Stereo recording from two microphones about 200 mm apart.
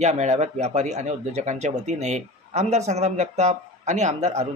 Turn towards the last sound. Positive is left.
turn(degrees=-35)  # may be behind; listen again after turning